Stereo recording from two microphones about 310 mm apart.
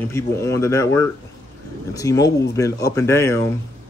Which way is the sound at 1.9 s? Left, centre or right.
Centre.